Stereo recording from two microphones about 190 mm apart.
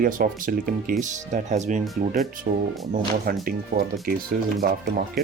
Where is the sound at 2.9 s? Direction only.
50° right (ahead or behind).